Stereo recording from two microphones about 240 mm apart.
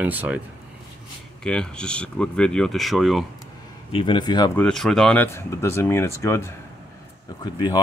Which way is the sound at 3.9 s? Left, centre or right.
Centre.